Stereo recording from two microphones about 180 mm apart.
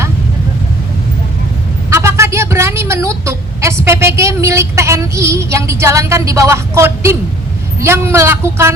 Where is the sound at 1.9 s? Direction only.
15° right (ahead or behind).